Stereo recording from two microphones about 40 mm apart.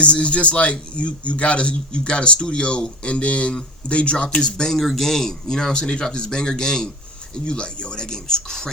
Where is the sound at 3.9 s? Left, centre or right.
Left.